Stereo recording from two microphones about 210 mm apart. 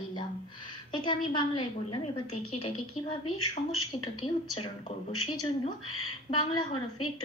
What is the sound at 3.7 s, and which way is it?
Speech, 90° left.